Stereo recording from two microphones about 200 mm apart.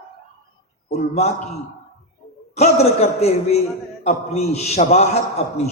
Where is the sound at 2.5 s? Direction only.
35° left (ahead or behind).